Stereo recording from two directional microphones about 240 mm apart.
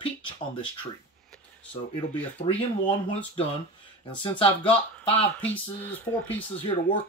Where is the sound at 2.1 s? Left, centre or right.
Centre.